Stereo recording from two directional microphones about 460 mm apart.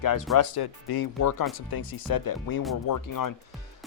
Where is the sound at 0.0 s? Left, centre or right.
Left.